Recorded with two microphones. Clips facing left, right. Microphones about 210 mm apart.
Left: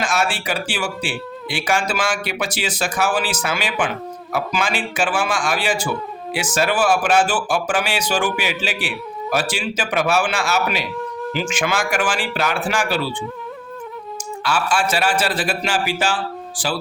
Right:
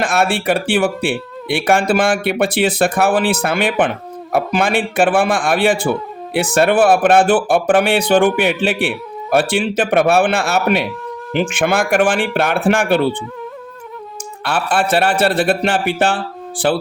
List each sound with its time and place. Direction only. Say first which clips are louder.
0.0 s speech: right 5 dB; 60° right (ahead or behind)
14.4 s speech: right 3 dB; 60° right (ahead or behind)